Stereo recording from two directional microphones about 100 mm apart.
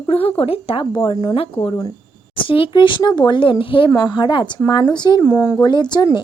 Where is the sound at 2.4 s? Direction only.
65° left (ahead or behind).